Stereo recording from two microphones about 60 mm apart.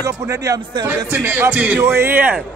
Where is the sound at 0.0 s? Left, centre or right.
Right.